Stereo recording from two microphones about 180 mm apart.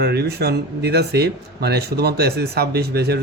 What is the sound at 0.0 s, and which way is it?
Speech, 60° right (ahead or behind).